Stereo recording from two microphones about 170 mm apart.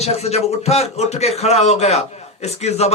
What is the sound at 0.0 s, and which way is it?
Speech, 40° left (ahead or behind).